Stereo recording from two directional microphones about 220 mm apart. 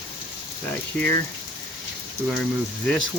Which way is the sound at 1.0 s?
5° left (ahead or behind).